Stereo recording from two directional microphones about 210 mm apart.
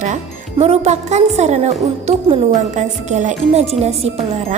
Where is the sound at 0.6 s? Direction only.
30° right (ahead or behind).